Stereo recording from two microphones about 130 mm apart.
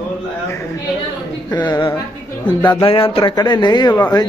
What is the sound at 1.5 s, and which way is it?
Speech, 35° left (ahead or behind).